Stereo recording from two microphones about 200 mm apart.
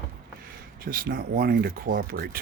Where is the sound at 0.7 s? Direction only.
45° right (ahead or behind).